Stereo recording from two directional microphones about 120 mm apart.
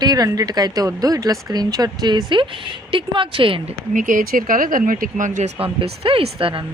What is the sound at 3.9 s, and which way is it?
Speech, 90° right.